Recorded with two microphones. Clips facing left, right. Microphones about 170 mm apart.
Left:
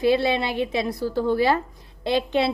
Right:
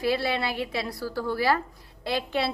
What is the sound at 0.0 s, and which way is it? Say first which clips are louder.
A woman's voice: left 6 dB; 20° left (ahead or behind).